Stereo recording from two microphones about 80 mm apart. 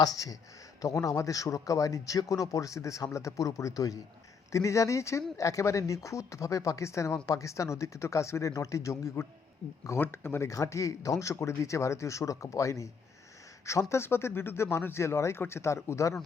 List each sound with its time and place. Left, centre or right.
0.0 s speech: left
10.5 s speech: left